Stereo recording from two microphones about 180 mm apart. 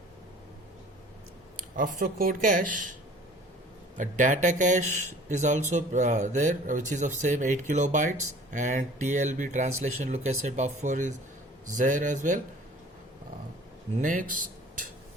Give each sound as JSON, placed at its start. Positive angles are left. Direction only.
{"t": 1.5, "sound": "speech", "side_deg": -50}
{"t": 3.9, "sound": "speech", "side_deg": -45}
{"t": 13.9, "sound": "speech", "side_deg": -45}